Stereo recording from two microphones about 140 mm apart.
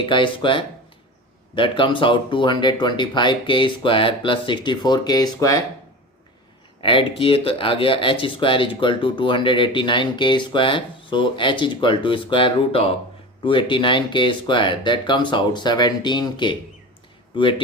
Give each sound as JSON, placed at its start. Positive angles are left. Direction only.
{"t": 0.0, "sound": "speech", "side_deg": 35}
{"t": 6.8, "sound": "speech", "side_deg": 40}